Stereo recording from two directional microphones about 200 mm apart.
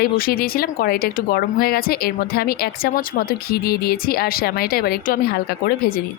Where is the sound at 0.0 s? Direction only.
50° left (ahead or behind).